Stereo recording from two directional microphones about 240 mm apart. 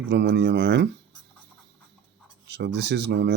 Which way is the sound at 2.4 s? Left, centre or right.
Right.